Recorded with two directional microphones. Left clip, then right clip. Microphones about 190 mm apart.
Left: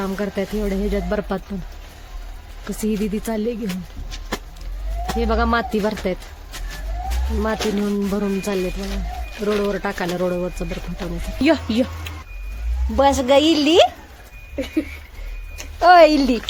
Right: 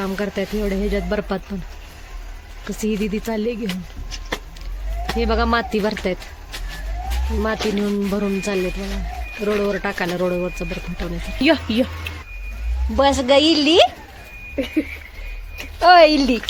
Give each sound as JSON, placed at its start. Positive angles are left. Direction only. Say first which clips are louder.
{"t": 0.0, "sound": "speech", "louder": "even", "side_deg": 0}
{"t": 2.6, "sound": "speech", "louder": "right 1 dB", "side_deg": 0}
{"t": 5.1, "sound": "speech", "louder": "even", "side_deg": 0}
{"t": 7.3, "sound": "speech", "louder": "right 1 dB", "side_deg": 0}
{"t": 13.0, "sound": "speech", "louder": "even", "side_deg": 0}
{"t": 14.5, "sound": "a sound", "louder": "right 2 dB", "side_deg": -45}
{"t": 15.8, "sound": "speech", "louder": "even", "side_deg": 5}